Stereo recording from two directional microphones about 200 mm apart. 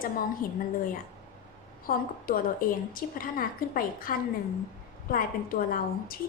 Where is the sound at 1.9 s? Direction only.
45° left (ahead or behind).